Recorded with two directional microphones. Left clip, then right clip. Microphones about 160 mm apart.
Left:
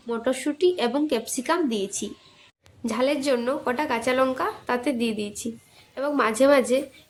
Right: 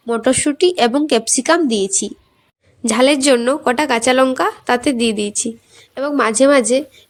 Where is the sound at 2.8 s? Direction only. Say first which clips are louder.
Right 11 dB; 55° right (ahead or behind).